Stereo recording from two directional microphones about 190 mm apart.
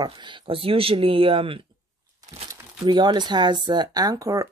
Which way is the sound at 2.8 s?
25° right (ahead or behind).